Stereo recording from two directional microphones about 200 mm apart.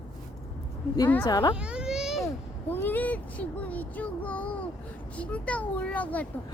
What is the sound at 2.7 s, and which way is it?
Speech, 10° left (ahead or behind).